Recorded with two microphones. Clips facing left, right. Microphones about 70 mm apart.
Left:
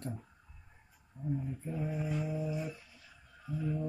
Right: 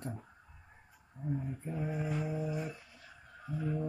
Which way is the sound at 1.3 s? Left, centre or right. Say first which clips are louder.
Even; right.